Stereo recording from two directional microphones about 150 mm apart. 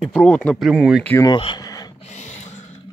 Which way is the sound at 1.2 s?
30° left (ahead or behind).